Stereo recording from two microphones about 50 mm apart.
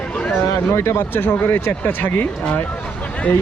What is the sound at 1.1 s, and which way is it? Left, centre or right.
Speech, left.